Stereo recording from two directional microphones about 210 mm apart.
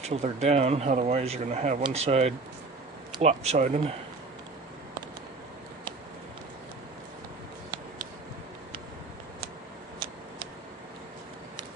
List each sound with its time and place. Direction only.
0.0 s speech: 30° right (ahead or behind)